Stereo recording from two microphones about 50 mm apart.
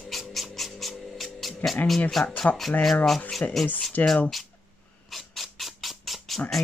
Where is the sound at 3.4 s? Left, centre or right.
Left.